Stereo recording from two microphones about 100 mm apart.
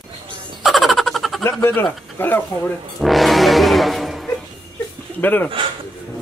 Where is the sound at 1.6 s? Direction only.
25° left (ahead or behind).